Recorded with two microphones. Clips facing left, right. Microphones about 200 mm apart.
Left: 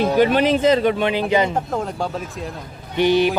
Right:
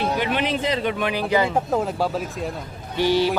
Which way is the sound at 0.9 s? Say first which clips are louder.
Left 3 dB; 25° left (ahead or behind).